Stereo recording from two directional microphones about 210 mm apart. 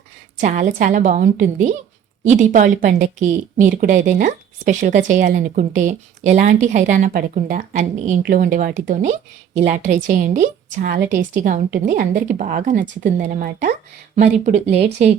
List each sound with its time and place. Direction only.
0.3 s a woman's voice: 35° right (ahead or behind)